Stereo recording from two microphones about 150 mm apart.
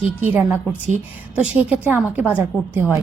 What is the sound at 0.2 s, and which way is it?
Speech, 10° right (ahead or behind).